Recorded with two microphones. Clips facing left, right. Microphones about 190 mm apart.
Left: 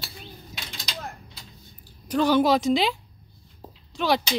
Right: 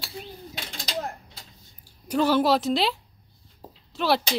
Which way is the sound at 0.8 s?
45° right (ahead or behind).